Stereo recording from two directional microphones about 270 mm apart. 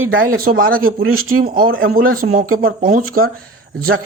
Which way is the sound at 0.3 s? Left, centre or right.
Right.